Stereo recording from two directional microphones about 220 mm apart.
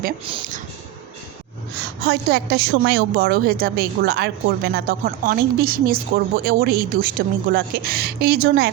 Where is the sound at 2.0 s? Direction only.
45° right (ahead or behind).